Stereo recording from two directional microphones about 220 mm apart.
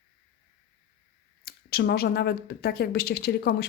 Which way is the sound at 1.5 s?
45° left (ahead or behind).